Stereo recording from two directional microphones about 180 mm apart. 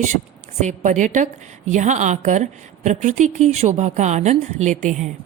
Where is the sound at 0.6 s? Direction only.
40° right (ahead or behind).